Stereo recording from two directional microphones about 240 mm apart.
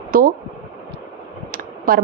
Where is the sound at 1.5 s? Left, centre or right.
Right.